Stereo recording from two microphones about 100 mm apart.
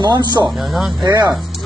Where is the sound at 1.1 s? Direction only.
40° right (ahead or behind).